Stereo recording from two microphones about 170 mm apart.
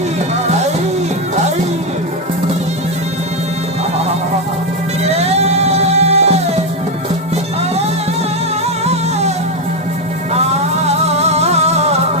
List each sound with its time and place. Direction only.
5.0 s music: 40° right (ahead or behind)
8.8 s music: 40° right (ahead or behind)
10.8 s music: 40° right (ahead or behind)